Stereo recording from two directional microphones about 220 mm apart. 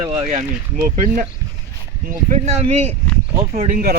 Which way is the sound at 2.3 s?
30° right (ahead or behind).